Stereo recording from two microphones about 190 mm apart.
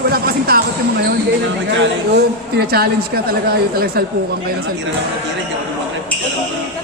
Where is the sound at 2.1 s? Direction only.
55° right (ahead or behind).